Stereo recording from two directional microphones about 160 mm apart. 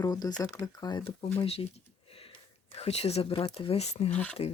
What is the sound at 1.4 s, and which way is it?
Speech, 40° left (ahead or behind).